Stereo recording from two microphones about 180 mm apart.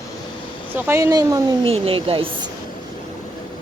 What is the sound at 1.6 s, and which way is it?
Speech, 30° right (ahead or behind).